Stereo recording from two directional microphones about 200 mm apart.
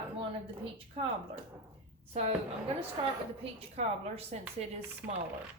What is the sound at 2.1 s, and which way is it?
Speech, 30° right (ahead or behind).